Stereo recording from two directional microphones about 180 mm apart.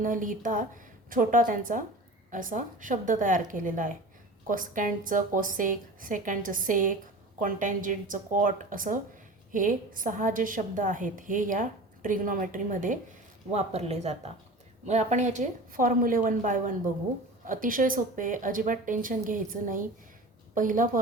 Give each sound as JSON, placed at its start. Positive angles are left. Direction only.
{"t": 0.0, "sound": "a woman's voice", "side_deg": -45}